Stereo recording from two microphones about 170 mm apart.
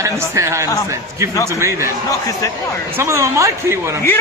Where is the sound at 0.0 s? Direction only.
15° right (ahead or behind).